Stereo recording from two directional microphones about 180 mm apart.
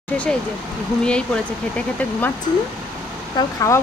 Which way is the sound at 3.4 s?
20° left (ahead or behind).